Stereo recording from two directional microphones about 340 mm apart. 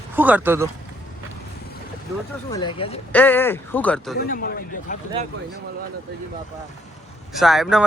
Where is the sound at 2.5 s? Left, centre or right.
Centre.